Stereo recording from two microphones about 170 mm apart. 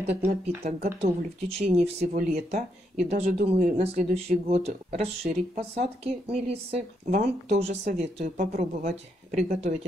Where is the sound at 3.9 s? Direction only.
40° right (ahead or behind).